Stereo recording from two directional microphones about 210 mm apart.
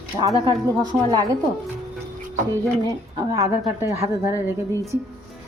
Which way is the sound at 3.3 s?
15° right (ahead or behind).